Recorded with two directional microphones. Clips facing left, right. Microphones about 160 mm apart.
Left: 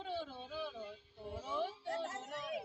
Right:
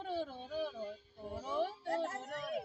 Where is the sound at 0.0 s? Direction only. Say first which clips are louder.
Right 3 dB; 50° right (ahead or behind).